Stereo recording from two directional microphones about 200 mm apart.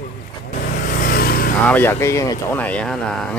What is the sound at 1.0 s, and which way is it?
Vehicle, 50° left (ahead or behind).